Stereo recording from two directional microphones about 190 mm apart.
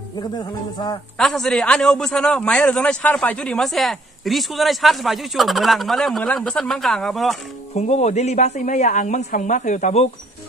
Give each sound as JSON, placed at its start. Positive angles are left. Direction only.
{"t": 0.4, "sound": "a man's voice", "side_deg": 20}
{"t": 1.1, "sound": "a man's voice", "side_deg": 5}
{"t": 7.7, "sound": "speech", "side_deg": 35}